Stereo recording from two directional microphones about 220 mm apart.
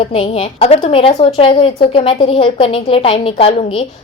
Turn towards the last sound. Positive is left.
turn(degrees=25)  # may be behind; listen again after turning